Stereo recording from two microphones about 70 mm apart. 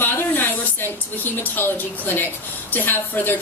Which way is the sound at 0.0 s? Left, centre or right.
Left.